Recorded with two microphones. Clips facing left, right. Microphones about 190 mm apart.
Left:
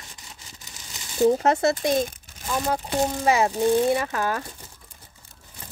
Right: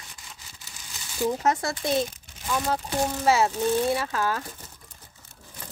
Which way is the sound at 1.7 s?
45° left (ahead or behind).